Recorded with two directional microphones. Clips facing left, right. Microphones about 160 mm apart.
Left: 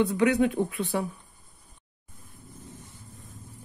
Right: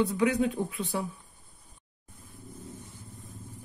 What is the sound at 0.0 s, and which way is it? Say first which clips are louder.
Speech: left 3 dB; 70° left (ahead or behind).